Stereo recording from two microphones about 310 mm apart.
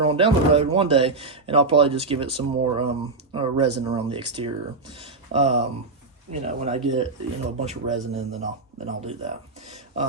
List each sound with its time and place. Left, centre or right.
0.0 s speech: centre